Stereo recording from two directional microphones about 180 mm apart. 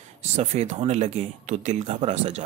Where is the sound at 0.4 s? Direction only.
35° right (ahead or behind).